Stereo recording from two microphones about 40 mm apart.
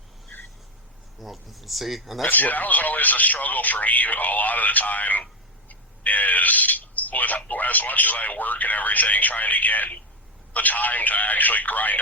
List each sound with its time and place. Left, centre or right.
1.2 s speech: centre
2.3 s speech: left